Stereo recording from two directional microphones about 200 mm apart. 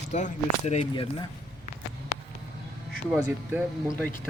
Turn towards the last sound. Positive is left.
turn(degrees=-5)  # may be behind; listen again after turning